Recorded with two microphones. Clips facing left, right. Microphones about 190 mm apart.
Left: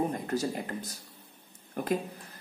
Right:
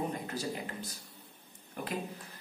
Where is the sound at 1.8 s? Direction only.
45° left (ahead or behind).